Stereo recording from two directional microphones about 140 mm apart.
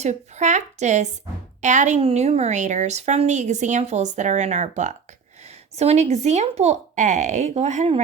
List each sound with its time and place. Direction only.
0.0 s a woman's voice: 55° right (ahead or behind)
2.0 s a woman's voice: 50° right (ahead or behind)